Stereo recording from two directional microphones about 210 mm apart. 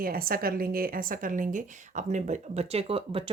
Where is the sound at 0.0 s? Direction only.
45° right (ahead or behind).